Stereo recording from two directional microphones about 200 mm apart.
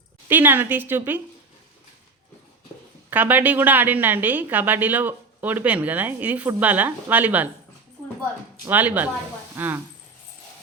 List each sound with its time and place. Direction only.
0.3 s a woman's voice: 10° right (ahead or behind)
3.1 s a woman's voice: 10° right (ahead or behind)
8.6 s a woman's voice: 10° right (ahead or behind)